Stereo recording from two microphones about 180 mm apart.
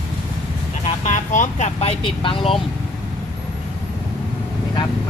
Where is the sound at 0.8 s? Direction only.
45° left (ahead or behind).